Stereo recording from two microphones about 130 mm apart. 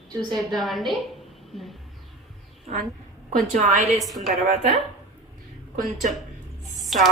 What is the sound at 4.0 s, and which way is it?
Speech, centre (ahead or behind).